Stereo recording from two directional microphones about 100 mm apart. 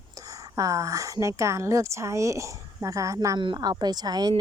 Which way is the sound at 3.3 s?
50° right (ahead or behind).